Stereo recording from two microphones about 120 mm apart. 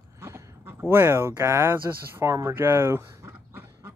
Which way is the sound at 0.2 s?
25° right (ahead or behind).